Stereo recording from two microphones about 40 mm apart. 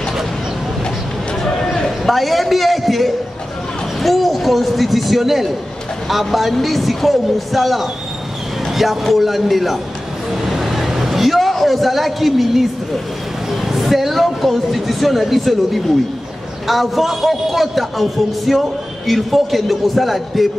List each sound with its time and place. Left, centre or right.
1.4 s run: centre
1.9 s a man's voice: centre
10.3 s a sound: centre
13.5 s a woman's voice: centre